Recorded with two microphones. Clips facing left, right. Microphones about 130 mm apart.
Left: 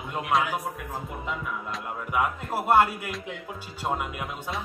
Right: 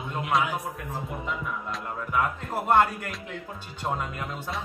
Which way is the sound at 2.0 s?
10° left (ahead or behind).